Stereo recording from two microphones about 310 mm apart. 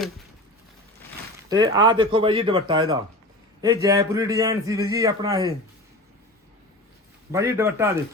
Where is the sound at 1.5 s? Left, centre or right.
Centre.